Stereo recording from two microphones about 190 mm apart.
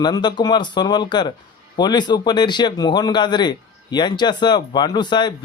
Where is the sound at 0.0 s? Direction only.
20° left (ahead or behind).